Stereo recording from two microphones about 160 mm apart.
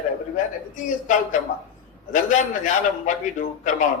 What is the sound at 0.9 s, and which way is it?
A man's voice, 55° left (ahead or behind).